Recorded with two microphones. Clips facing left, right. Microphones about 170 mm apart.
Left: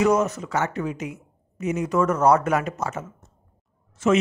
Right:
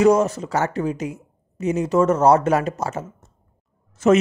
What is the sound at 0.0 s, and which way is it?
Speech, 35° right (ahead or behind).